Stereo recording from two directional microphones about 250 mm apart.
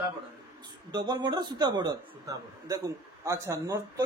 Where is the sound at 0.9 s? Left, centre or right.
Centre.